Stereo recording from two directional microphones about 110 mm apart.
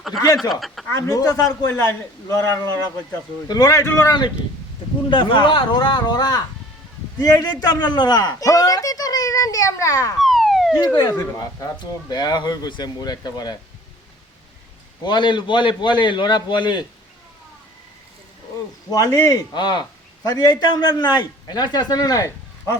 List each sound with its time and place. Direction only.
0.3 s speech: centre (ahead or behind)
0.9 s a man's voice: 30° left (ahead or behind)
3.5 s a man's voice: 35° left (ahead or behind)
5.0 s a man's voice: 45° left (ahead or behind); by 10.2 s 30° left (ahead or behind)
10.2 s police car: centre (ahead or behind)
10.8 s a man's voice: 35° left (ahead or behind)
15.0 s a man's voice: 45° left (ahead or behind)
18.9 s a man's voice: 35° left (ahead or behind)